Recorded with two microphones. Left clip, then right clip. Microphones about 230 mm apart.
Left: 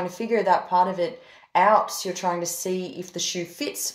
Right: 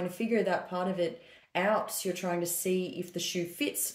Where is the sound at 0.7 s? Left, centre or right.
Left.